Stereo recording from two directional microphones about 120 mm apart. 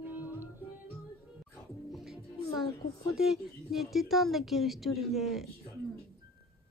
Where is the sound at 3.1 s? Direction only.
Centre (ahead or behind).